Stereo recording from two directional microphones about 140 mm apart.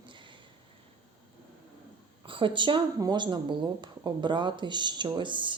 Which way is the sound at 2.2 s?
35° right (ahead or behind).